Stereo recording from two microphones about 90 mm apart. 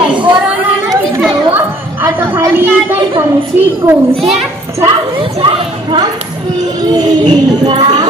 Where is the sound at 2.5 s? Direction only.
25° right (ahead or behind).